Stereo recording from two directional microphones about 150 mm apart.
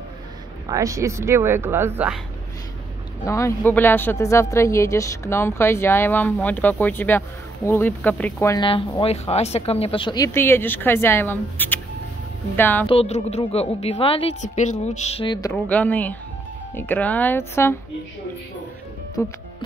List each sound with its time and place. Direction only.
0.7 s speech: 20° right (ahead or behind)
3.3 s speech: 20° left (ahead or behind)
8.5 s speech: 35° left (ahead or behind); by 12.8 s 15° left (ahead or behind)
12.8 s a woman's voice: 40° left (ahead or behind)
15.5 s speech: 10° left (ahead or behind)
19.2 s speech: 20° left (ahead or behind)